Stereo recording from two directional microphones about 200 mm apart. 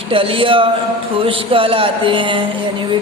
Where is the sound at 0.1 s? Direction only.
25° right (ahead or behind).